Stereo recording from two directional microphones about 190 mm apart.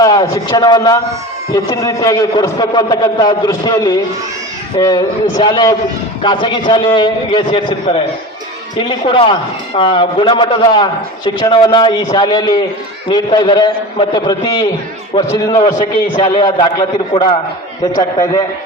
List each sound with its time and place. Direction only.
0.0 s a man's voice: 20° left (ahead or behind)